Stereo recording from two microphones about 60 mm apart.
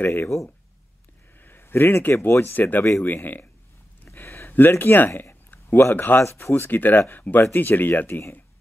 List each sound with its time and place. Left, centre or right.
0.0 s speech: left
1.4 s speech: left
4.0 s a sound: left
6.5 s speech: left